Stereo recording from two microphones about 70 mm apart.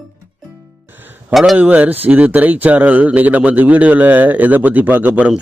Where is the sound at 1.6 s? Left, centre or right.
Right.